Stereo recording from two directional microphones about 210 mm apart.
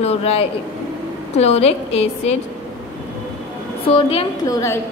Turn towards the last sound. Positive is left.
turn(degrees=15)  # may be behind; listen again after turning